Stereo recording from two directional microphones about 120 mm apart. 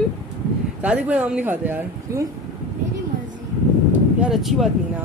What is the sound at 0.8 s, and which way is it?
Speech, 10° right (ahead or behind).